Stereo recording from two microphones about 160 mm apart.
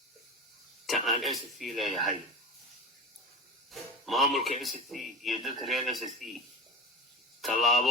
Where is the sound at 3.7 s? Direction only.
Centre (ahead or behind).